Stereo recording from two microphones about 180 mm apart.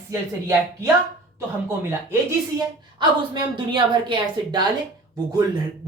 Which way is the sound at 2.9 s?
25° right (ahead or behind).